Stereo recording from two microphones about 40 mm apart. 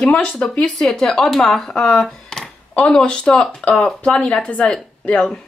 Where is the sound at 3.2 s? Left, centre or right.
Centre.